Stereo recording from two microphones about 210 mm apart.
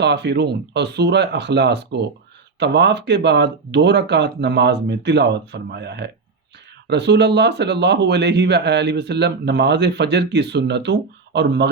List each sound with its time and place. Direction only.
0.0 s speech: 55° right (ahead or behind)